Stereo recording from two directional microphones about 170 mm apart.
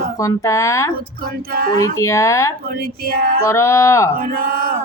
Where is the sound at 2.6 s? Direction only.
60° right (ahead or behind).